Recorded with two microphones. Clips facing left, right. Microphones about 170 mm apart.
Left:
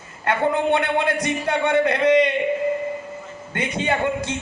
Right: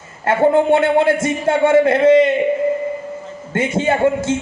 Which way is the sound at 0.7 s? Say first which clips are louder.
Right 7 dB; 25° right (ahead or behind).